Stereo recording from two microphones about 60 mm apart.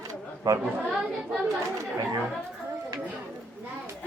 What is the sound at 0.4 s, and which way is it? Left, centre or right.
Speech, right.